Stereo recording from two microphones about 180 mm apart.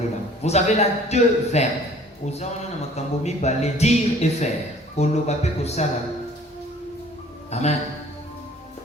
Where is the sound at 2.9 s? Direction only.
40° left (ahead or behind).